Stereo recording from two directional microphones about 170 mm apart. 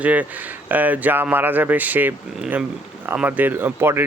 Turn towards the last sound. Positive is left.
turn(degrees=-10)  # may be behind; listen again after turning